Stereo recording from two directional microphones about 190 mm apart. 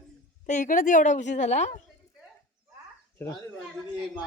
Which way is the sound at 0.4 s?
40° left (ahead or behind).